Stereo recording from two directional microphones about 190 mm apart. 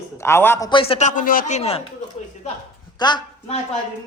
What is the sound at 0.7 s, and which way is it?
Speech, 30° left (ahead or behind).